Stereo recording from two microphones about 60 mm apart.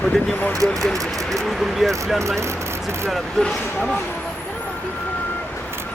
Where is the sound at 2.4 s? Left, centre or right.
Right.